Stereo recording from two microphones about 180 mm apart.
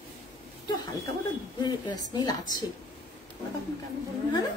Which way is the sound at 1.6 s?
20° left (ahead or behind).